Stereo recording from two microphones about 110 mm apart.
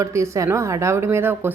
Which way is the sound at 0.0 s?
30° right (ahead or behind).